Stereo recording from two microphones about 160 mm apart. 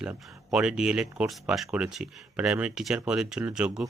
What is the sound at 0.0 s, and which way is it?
Speech, 5° right (ahead or behind).